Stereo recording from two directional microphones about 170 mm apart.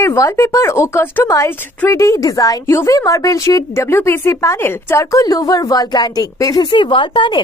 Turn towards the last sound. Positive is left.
turn(degrees=30)  # may be behind; listen again after turning